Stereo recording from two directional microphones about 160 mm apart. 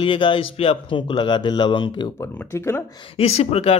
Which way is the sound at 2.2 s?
15° left (ahead or behind).